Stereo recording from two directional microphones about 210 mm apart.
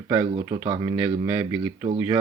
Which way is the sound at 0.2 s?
20° right (ahead or behind).